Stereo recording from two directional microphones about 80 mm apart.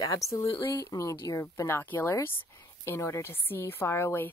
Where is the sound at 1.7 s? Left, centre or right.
Left.